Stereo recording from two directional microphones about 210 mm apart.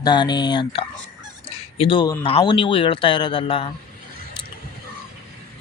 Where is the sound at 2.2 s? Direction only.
25° left (ahead or behind).